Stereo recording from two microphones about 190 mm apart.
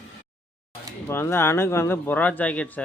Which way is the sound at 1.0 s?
10° left (ahead or behind).